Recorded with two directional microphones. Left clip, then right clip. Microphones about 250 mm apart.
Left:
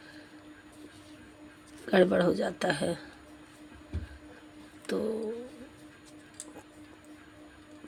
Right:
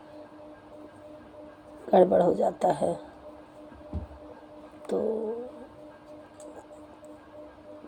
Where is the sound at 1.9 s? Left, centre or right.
Left.